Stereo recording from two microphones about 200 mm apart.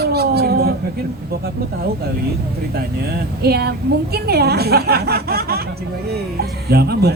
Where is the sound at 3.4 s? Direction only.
55° right (ahead or behind).